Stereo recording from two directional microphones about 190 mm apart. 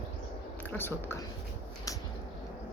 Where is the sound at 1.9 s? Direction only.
20° left (ahead or behind).